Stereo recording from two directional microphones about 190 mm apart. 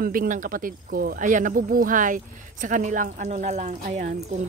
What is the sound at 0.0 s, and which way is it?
A woman's voice, 50° right (ahead or behind).